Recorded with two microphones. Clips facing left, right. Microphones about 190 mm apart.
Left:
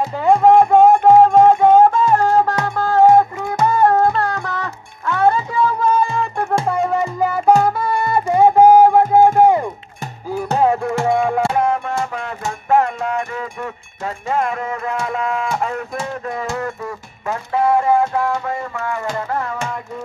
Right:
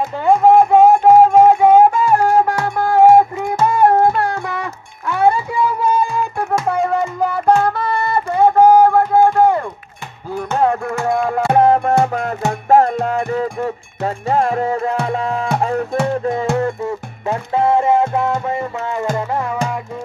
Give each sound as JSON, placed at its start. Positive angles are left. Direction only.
{"t": 0.2, "sound": "music", "side_deg": 0}
{"t": 10.6, "sound": "music", "side_deg": 5}
{"t": 11.5, "sound": "music", "side_deg": -35}